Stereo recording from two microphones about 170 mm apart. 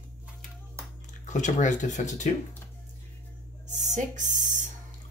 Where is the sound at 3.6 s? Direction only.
45° right (ahead or behind).